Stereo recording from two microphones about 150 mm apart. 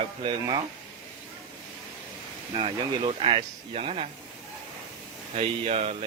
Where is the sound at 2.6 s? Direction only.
40° right (ahead or behind).